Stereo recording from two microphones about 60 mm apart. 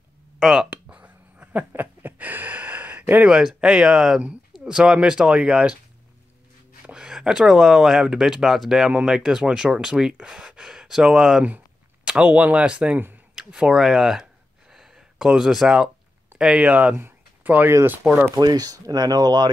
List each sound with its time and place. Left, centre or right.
0.4 s speech: centre
0.7 s a sound: right
3.3 s speech: centre
6.9 s speech: centre
12.0 s speech: centre
14.7 s a sound: centre
16.5 s speech: right
16.9 s a sound: right
18.3 s speech: right